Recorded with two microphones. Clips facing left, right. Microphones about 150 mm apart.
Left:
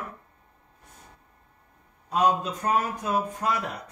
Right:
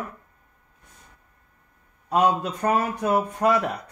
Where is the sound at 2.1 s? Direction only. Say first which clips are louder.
Right 2 dB; 60° right (ahead or behind).